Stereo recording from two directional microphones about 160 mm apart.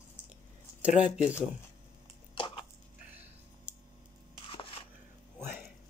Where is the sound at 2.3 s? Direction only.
35° left (ahead or behind).